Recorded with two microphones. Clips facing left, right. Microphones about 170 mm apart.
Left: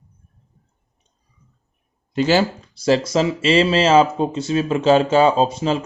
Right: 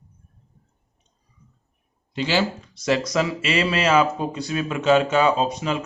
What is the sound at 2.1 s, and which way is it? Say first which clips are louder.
Speech: left 6 dB; 45° left (ahead or behind).